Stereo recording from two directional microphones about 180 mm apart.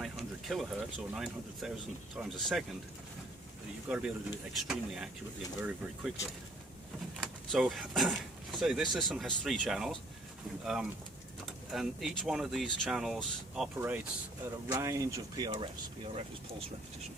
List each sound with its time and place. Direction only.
0.0 s speech: centre (ahead or behind)
3.9 s speech: 5° right (ahead or behind)
7.2 s speech: centre (ahead or behind); by 15.7 s 25° right (ahead or behind)